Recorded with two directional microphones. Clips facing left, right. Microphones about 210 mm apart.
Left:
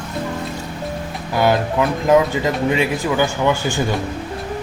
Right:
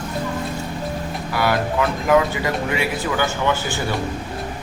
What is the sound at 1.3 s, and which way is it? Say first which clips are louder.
Speech: left 4 dB; 20° left (ahead or behind).